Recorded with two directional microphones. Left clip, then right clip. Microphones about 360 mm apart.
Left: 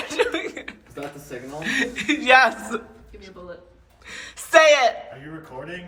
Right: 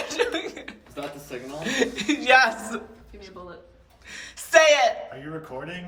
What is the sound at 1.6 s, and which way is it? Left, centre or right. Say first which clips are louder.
Speech: left 1 dB; centre.